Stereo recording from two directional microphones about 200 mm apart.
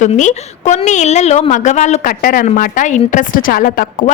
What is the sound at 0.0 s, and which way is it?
Speech, 35° left (ahead or behind).